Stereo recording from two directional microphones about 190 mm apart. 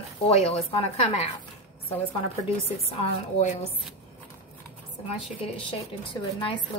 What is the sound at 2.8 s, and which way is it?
Speech, 35° left (ahead or behind).